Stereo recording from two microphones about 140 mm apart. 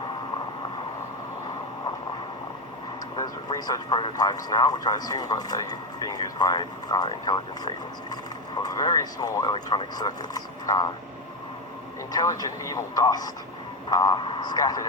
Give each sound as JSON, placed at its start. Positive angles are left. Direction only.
{"t": 3.2, "sound": "speech", "side_deg": 25}
{"t": 12.1, "sound": "speech", "side_deg": 25}